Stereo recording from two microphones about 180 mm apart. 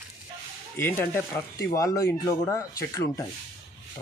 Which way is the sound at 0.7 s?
10° left (ahead or behind).